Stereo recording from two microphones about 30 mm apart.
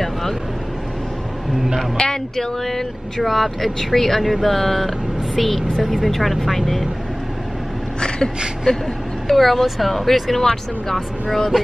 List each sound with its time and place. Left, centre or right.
0.0 s vehicle: centre
2.0 s speech: left
2.3 s speech: centre
9.3 s speech: centre
10.3 s speech: centre